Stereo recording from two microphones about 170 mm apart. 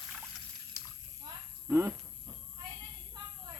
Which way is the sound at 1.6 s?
15° right (ahead or behind).